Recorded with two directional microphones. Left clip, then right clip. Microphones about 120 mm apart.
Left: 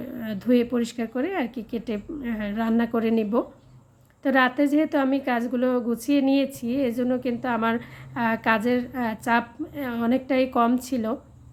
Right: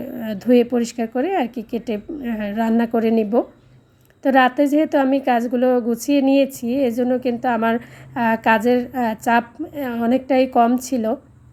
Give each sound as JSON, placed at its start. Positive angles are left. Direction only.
{"t": 0.0, "sound": "a woman's voice", "side_deg": -30}